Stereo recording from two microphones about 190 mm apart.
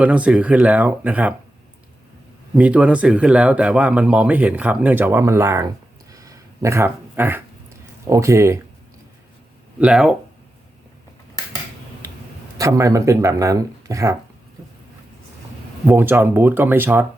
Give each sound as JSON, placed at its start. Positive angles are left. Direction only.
{"t": 0.0, "sound": "a man's voice", "side_deg": -5}
{"t": 2.6, "sound": "a man's voice", "side_deg": -5}
{"t": 6.1, "sound": "a sound", "side_deg": -15}
{"t": 8.0, "sound": "a man's voice", "side_deg": -15}
{"t": 9.8, "sound": "speech", "side_deg": -5}
{"t": 12.5, "sound": "a man's voice", "side_deg": -15}
{"t": 15.9, "sound": "a man's voice", "side_deg": -10}